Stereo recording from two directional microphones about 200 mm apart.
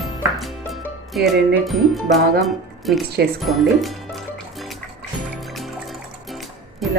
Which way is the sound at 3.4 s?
Centre (ahead or behind).